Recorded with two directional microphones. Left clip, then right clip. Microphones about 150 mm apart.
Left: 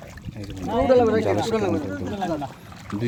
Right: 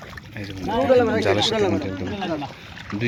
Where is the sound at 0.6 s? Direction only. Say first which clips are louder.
Right 1 dB; 10° left (ahead or behind).